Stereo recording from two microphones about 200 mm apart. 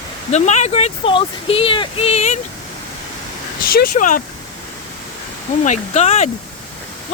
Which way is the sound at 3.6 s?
45° left (ahead or behind).